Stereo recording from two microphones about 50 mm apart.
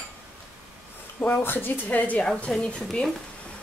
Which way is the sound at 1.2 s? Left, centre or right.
Left.